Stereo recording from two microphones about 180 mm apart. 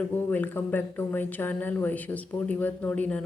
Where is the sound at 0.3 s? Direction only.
10° left (ahead or behind).